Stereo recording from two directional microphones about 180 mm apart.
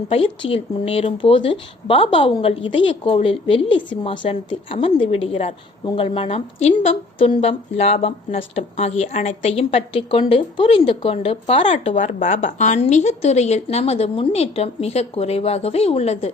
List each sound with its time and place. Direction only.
0.1 s a woman's voice: 30° left (ahead or behind)